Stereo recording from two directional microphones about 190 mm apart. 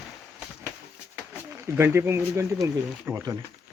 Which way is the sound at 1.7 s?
10° right (ahead or behind).